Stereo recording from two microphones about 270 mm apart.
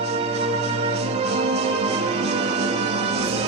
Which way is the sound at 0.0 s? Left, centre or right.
Right.